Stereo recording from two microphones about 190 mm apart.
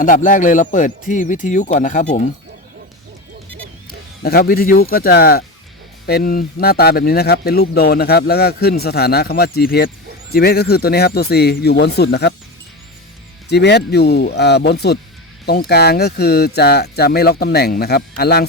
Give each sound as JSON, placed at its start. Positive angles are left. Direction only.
{"t": 0.0, "sound": "speech", "side_deg": 45}
{"t": 4.2, "sound": "speech", "side_deg": 55}
{"t": 13.5, "sound": "speech", "side_deg": 60}